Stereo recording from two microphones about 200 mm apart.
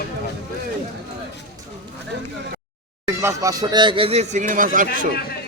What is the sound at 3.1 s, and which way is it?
Speech, 10° right (ahead or behind).